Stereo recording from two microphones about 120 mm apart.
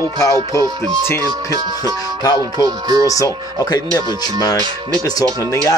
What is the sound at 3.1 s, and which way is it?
Speech, 30° left (ahead or behind).